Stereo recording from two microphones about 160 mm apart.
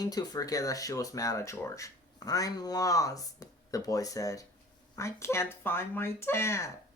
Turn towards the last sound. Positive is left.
turn(degrees=15)  # may be behind; listen again after turning